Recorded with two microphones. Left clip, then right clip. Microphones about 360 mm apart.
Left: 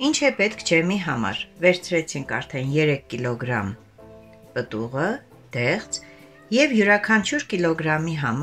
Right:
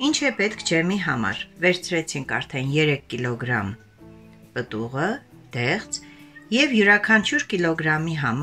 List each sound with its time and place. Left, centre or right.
0.0 s speech: centre